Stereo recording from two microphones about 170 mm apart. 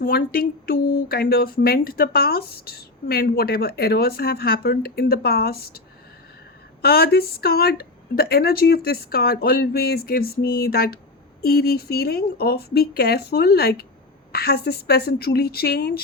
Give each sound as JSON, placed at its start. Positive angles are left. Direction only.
{"t": 0.0, "sound": "speech", "side_deg": 60}
{"t": 6.8, "sound": "speech", "side_deg": 65}